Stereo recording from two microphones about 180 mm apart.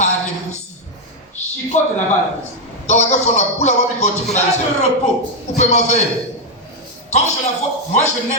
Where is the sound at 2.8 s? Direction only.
40° left (ahead or behind).